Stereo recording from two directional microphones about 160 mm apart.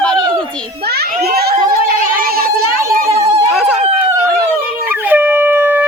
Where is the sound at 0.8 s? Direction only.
80° right.